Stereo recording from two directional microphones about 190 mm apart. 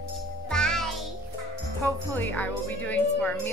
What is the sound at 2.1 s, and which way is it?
A woman's voice, 10° left (ahead or behind).